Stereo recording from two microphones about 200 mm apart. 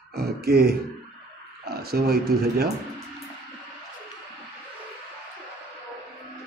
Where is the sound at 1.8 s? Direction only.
50° right (ahead or behind).